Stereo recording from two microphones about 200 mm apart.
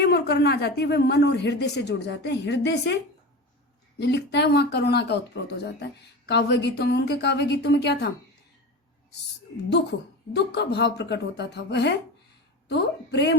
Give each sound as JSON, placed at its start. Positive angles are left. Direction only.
{"t": 0.0, "sound": "speech", "side_deg": 55}
{"t": 10.3, "sound": "speech", "side_deg": 55}